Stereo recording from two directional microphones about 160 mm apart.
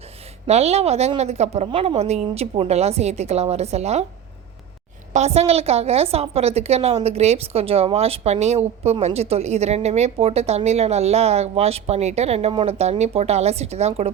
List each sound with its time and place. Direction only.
0.4 s a woman's voice: 40° right (ahead or behind)
1.6 s a woman's voice: 30° right (ahead or behind)
5.1 s a woman's voice: 40° right (ahead or behind)